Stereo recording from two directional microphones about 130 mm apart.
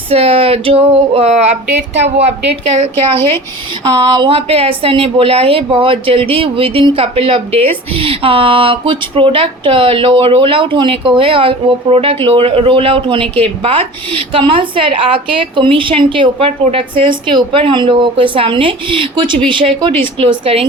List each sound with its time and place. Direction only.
0.1 s speech: 50° right (ahead or behind)
4.1 s speech: 40° right (ahead or behind)
13.2 s speech: 10° left (ahead or behind)
13.6 s a woman's voice: 45° right (ahead or behind)